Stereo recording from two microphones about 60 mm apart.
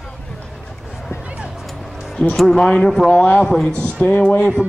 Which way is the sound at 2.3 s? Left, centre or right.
Centre.